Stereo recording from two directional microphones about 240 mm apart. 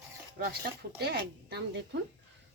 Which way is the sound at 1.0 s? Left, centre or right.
Right.